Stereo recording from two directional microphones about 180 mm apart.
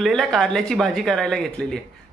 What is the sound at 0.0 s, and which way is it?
Speech, centre (ahead or behind).